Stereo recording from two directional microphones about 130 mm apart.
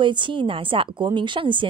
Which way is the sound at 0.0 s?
40° right (ahead or behind).